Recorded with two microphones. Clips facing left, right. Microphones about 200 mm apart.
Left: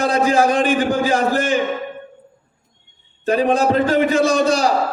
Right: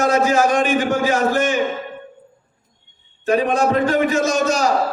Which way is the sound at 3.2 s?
30° left (ahead or behind).